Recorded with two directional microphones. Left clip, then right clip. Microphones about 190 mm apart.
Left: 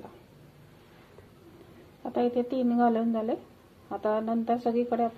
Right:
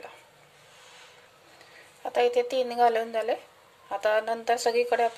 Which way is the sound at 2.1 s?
15° right (ahead or behind).